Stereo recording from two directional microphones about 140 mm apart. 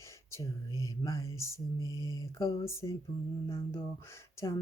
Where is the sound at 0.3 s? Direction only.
20° left (ahead or behind).